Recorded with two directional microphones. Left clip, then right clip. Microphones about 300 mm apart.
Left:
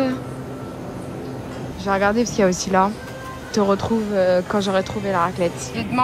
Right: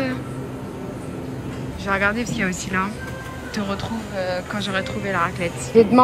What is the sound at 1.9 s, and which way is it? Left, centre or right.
Speech, centre.